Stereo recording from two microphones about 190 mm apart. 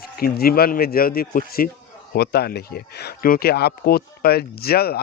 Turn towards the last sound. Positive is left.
turn(degrees=55)  # may be behind; listen again after turning